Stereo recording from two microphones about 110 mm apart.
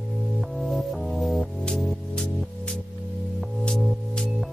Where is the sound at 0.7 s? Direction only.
Centre (ahead or behind).